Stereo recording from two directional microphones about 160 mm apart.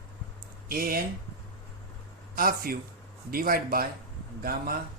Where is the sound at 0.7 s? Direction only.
65° right (ahead or behind).